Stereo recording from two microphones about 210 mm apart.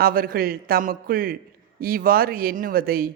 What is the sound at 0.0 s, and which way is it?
A man's voice, 45° right (ahead or behind).